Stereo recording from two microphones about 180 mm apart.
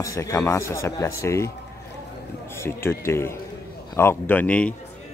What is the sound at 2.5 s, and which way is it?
Speech, 15° left (ahead or behind).